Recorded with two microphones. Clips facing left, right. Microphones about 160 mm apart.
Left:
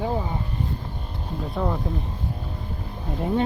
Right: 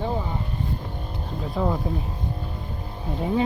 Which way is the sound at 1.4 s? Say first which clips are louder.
Right 1 dB; centre (ahead or behind).